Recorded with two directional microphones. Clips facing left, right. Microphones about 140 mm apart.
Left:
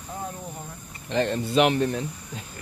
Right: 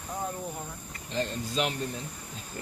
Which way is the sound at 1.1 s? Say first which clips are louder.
Left 9 dB; 75° left (ahead or behind).